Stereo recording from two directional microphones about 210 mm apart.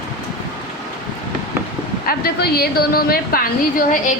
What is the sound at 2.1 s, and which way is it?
A woman's voice, 50° left (ahead or behind).